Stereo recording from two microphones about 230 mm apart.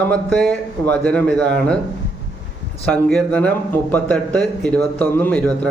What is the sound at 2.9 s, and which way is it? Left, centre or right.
Speech, centre.